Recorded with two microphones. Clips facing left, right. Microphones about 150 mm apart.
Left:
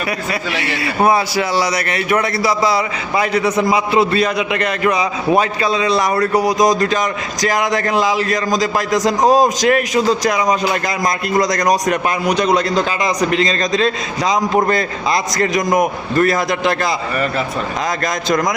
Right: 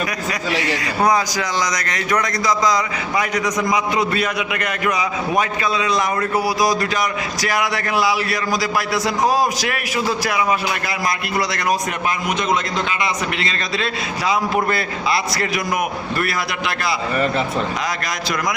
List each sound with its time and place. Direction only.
3.2 s a man's voice: 30° left (ahead or behind)
7.4 s a man's voice: 40° left (ahead or behind)